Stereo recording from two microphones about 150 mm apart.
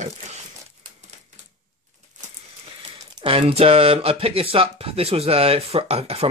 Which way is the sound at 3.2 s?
35° right (ahead or behind).